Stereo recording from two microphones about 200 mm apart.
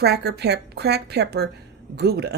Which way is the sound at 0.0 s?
55° right (ahead or behind).